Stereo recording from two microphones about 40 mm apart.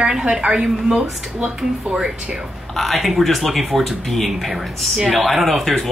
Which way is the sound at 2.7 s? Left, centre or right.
Centre.